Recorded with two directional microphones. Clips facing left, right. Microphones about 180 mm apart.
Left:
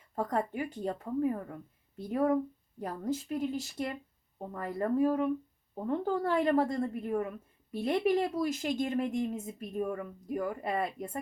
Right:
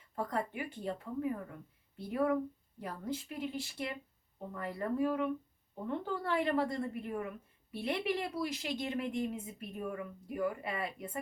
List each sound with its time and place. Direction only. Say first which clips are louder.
0.2 s speech: left 4 dB; 45° left (ahead or behind)